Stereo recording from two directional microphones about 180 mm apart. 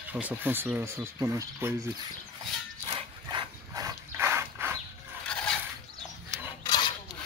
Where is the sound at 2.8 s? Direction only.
25° right (ahead or behind).